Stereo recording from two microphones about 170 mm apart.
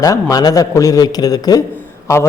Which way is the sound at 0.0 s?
20° left (ahead or behind).